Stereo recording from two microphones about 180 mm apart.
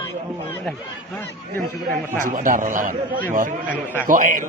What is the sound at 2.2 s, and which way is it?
A man's voice, 45° right (ahead or behind).